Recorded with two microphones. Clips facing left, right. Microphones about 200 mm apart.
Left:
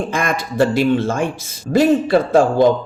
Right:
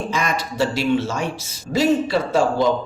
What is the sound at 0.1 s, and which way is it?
A man's voice, 50° left (ahead or behind).